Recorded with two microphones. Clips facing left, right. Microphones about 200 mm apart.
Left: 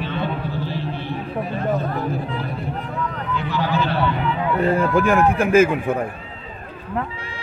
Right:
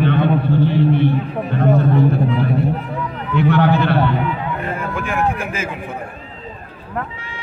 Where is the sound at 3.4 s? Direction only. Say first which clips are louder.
Right 8 dB; 65° right (ahead or behind).